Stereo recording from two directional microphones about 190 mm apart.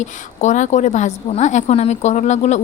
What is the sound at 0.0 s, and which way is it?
A woman's voice, 40° left (ahead or behind).